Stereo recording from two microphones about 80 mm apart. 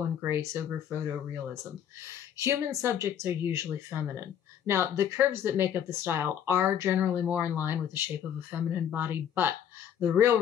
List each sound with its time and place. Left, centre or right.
0.2 s speech: right
2.3 s speech: right